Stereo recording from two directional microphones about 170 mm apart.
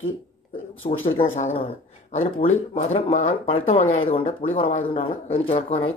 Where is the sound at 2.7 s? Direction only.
40° left (ahead or behind).